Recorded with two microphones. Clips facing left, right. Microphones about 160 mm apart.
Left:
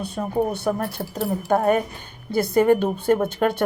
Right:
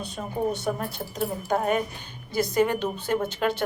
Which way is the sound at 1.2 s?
50° left (ahead or behind).